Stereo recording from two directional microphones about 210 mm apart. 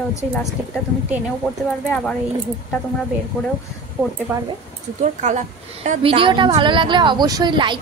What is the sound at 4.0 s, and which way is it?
Speech, 5° right (ahead or behind).